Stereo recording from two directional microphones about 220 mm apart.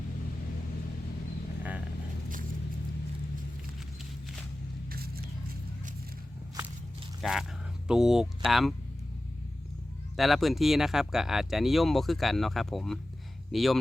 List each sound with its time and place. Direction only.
4.9 s vehicle: 45° right (ahead or behind)
7.2 s speech: centre (ahead or behind)
10.2 s speech: centre (ahead or behind)